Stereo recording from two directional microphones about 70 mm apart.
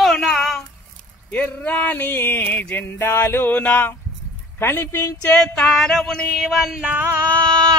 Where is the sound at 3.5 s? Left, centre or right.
Left.